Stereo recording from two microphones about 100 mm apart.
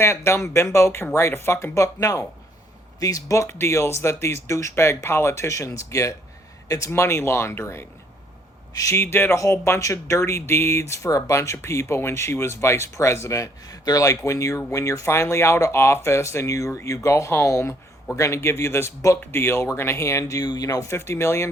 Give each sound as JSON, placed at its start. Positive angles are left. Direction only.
{"t": 0.0, "sound": "speech", "side_deg": 25}